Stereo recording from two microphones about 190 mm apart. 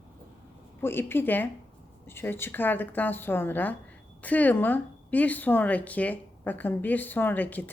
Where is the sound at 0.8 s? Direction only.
10° left (ahead or behind).